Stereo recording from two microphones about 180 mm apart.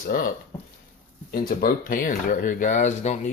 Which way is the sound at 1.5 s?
50° left (ahead or behind).